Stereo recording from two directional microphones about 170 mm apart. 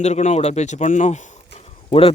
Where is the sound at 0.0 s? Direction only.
40° left (ahead or behind).